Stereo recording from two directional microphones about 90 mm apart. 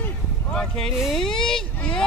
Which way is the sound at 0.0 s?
10° left (ahead or behind).